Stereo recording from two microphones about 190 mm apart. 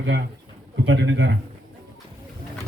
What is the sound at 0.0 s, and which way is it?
A man's voice, 65° right (ahead or behind).